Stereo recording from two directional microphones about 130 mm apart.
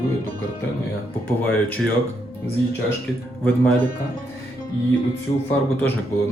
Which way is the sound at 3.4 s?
10° left (ahead or behind).